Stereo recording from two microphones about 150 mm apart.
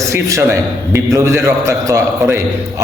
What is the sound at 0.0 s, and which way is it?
A man's voice, 20° right (ahead or behind).